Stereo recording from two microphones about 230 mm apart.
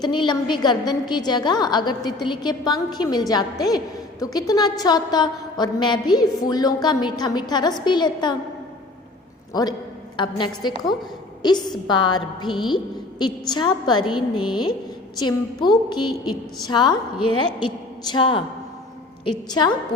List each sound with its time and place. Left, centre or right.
0.0 s a woman's voice: centre
9.5 s a man's voice: centre